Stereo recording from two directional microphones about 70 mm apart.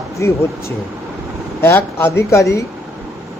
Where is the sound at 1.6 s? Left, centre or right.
Left.